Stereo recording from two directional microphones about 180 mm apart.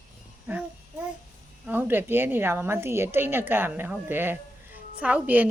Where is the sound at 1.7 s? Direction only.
10° right (ahead or behind).